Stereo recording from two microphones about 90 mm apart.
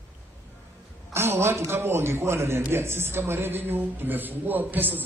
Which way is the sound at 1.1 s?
25° right (ahead or behind).